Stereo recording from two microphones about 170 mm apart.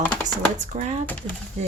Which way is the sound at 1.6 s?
40° right (ahead or behind).